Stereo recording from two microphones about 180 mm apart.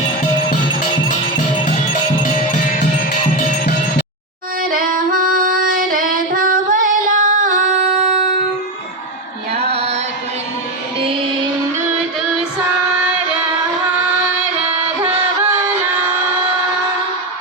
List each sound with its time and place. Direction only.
4.6 s female singing: 50° right (ahead or behind)
9.7 s chant: 35° right (ahead or behind)